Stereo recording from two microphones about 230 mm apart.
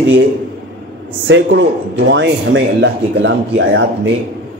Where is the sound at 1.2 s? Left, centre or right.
Right.